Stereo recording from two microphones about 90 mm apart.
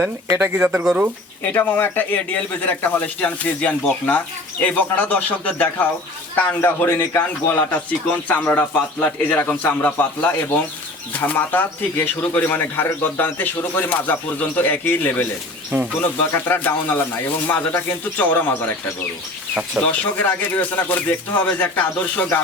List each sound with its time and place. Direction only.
0.5 s speech: 15° right (ahead or behind)
1.5 s a man's voice: 25° left (ahead or behind)
15.7 s speech: 25° right (ahead or behind)
16.2 s a man's voice: 25° left (ahead or behind)
19.8 s a man's voice: 20° left (ahead or behind)